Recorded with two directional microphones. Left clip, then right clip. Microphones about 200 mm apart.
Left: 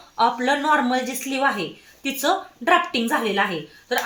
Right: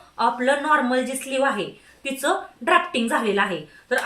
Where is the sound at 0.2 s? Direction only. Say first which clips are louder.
Left 1 dB; 30° left (ahead or behind).